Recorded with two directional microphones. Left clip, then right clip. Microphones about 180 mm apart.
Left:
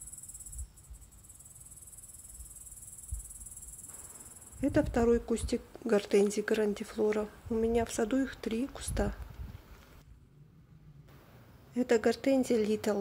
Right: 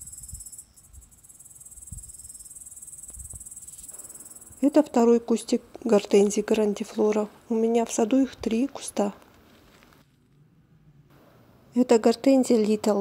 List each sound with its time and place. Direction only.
4.6 s a woman's voice: 25° right (ahead or behind)
11.7 s a woman's voice: 25° right (ahead or behind)